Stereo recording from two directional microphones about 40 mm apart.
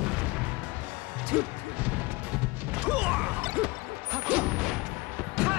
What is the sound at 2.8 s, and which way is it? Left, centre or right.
Smash, right.